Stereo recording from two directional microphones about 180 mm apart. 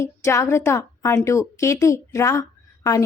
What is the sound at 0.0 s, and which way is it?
Speech, 15° left (ahead or behind).